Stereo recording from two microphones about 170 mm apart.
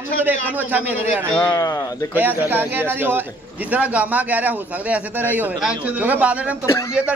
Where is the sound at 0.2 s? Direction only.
10° right (ahead or behind).